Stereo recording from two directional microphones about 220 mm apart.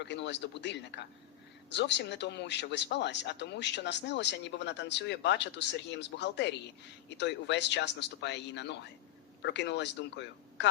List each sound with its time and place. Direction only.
0.0 s speech: 55° left (ahead or behind)